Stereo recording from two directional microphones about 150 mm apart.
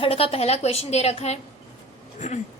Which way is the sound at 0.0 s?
40° left (ahead or behind).